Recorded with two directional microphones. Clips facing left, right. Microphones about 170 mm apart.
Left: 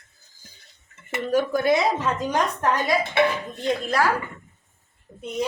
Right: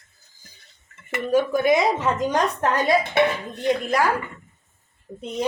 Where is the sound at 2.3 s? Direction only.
25° right (ahead or behind).